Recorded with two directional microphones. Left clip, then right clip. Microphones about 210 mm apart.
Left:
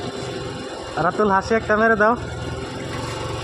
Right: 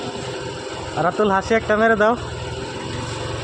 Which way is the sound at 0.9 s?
Centre (ahead or behind).